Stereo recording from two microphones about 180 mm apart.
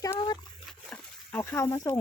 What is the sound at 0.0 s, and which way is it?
Dog, 20° left (ahead or behind).